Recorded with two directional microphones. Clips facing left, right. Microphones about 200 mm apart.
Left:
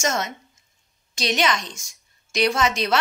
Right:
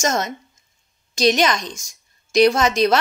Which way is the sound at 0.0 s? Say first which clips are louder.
Right 3 dB; 40° right (ahead or behind).